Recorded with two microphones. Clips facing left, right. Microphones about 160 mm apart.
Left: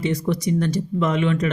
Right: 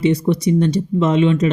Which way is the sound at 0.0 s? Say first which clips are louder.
Right 6 dB; 20° right (ahead or behind).